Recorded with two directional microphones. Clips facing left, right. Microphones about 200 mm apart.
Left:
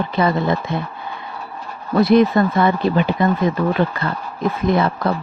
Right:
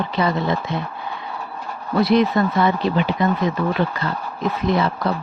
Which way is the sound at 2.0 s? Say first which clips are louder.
Left 3 dB; 50° left (ahead or behind).